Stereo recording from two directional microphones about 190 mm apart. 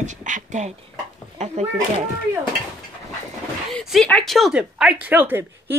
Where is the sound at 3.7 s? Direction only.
Centre (ahead or behind).